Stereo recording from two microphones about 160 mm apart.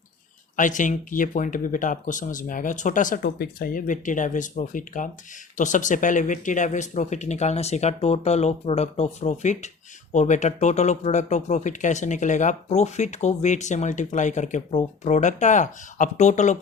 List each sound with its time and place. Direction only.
0.5 s speech: 55° left (ahead or behind)